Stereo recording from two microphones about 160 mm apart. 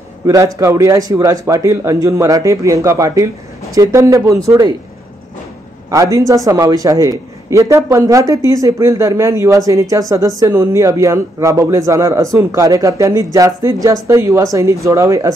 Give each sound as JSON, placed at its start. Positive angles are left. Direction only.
{"t": 0.3, "sound": "a man's voice", "side_deg": -20}
{"t": 5.9, "sound": "a man's voice", "side_deg": -20}